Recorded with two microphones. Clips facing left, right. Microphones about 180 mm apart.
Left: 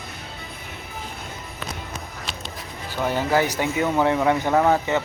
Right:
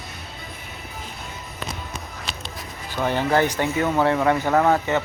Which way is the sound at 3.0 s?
10° left (ahead or behind).